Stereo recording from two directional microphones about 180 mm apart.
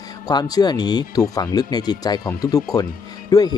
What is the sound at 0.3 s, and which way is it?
Speech, 20° left (ahead or behind).